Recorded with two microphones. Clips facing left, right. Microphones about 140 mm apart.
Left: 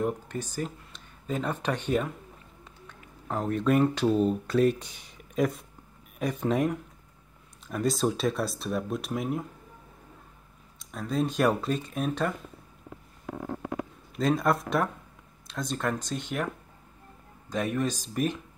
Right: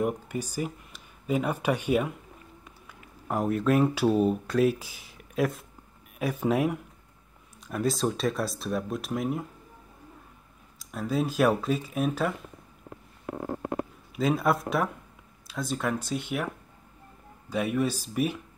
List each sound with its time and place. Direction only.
0.0 s speech: 10° right (ahead or behind)
10.8 s speech: 5° right (ahead or behind)
13.3 s stomach rumble: 60° right (ahead or behind)
14.1 s speech: 5° right (ahead or behind)
17.5 s speech: 10° right (ahead or behind)